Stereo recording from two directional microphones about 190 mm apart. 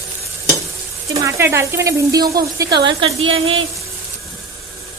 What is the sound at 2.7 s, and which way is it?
Speech, 60° right (ahead or behind).